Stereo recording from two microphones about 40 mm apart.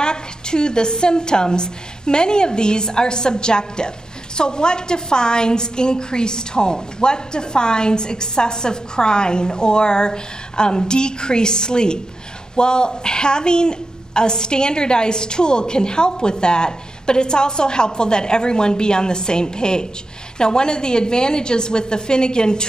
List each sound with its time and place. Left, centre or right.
0.0 s a woman's voice: left